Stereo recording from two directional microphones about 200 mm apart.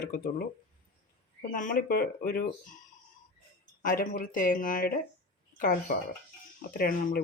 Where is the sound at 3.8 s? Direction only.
45° left (ahead or behind).